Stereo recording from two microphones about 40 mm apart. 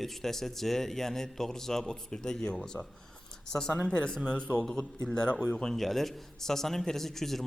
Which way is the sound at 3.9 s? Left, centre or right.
Left.